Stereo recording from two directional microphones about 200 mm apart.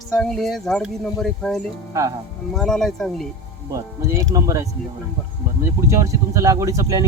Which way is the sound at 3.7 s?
15° right (ahead or behind).